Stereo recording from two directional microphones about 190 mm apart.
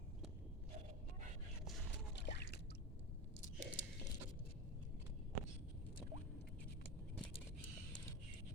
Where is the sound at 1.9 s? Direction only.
65° left (ahead or behind).